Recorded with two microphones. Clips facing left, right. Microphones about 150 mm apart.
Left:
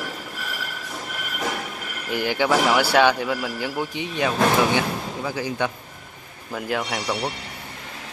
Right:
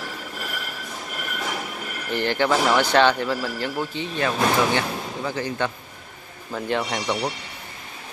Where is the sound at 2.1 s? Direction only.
10° left (ahead or behind).